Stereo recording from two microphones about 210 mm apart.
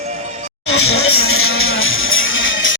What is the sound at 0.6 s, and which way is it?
Music, 90° left.